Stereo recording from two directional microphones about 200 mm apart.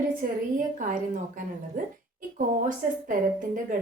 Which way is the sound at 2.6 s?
40° right (ahead or behind).